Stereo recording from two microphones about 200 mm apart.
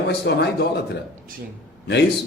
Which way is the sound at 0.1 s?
60° left (ahead or behind).